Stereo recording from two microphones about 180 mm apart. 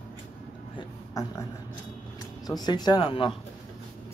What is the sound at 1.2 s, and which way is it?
Speech, 20° left (ahead or behind).